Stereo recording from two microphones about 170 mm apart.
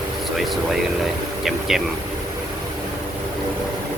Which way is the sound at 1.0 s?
Centre (ahead or behind).